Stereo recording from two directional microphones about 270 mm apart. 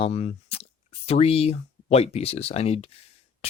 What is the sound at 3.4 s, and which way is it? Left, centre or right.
Beatboxing, left.